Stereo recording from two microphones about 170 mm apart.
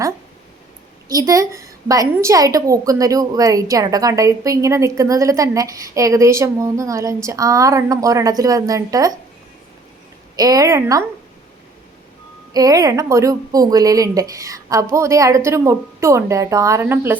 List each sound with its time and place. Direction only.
1.0 s a woman's voice: 20° right (ahead or behind)
10.3 s a woman's voice: 20° right (ahead or behind)
12.5 s a woman's voice: 20° right (ahead or behind)